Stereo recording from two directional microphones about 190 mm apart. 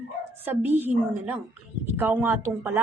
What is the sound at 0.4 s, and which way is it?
Speech, 10° right (ahead or behind).